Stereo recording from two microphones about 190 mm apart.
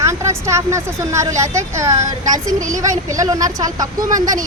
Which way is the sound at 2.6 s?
40° right (ahead or behind).